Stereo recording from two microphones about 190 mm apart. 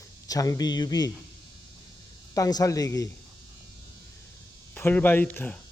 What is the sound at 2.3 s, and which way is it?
Speech, 20° left (ahead or behind).